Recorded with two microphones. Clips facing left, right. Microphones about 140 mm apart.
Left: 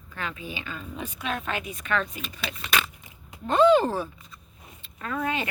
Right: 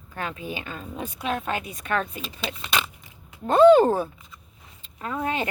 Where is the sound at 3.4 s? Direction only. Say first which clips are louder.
Right 5 dB; 50° right (ahead or behind).